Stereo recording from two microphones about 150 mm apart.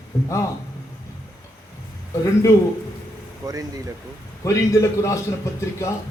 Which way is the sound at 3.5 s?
25° right (ahead or behind).